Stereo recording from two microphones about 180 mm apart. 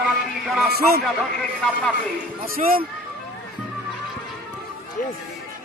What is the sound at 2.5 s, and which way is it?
Speech, 55° right (ahead or behind).